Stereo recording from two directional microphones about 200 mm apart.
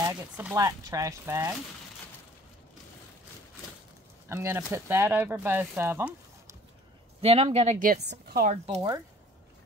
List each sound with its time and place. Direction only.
0.0 s speech: 10° right (ahead or behind)
4.3 s speech: 10° right (ahead or behind)
7.2 s speech: 30° right (ahead or behind)
7.8 s a woman's voice: 50° right (ahead or behind)
8.5 s speech: 30° right (ahead or behind)